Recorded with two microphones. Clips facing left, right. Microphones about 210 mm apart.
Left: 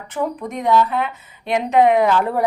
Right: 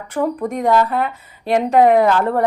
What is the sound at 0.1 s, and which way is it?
Speech, 50° right (ahead or behind).